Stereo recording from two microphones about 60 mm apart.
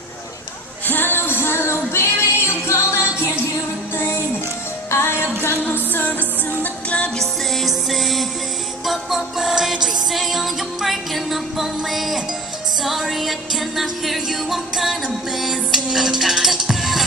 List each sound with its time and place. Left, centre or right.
0.8 s music: left
4.9 s music: left
6.0 s music: left
7.2 s music: centre